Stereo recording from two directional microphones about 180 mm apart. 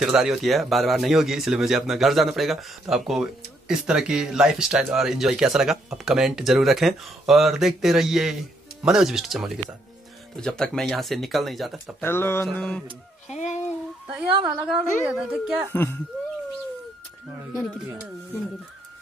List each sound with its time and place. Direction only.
0.0 s a man's voice: 5° right (ahead or behind)
12.0 s a man's voice: 10° left (ahead or behind)
13.3 s speech: 40° left (ahead or behind)
14.7 s a man's voice: 5° right (ahead or behind)
15.7 s speech: 10° left (ahead or behind)